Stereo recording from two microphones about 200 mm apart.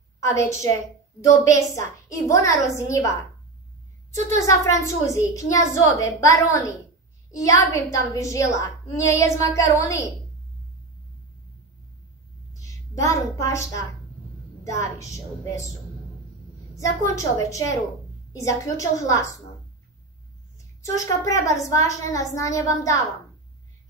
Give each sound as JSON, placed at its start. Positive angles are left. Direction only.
{"t": 0.2, "sound": "a woman's voice", "side_deg": 15}
{"t": 4.5, "sound": "a woman's voice", "side_deg": 15}
{"t": 12.5, "sound": "a woman's voice", "side_deg": 15}
{"t": 16.7, "sound": "a woman's voice", "side_deg": 15}
{"t": 20.5, "sound": "a woman's voice", "side_deg": 15}